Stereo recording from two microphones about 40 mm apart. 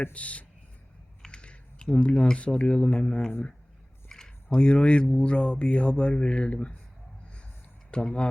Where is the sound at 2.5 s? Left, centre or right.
Left.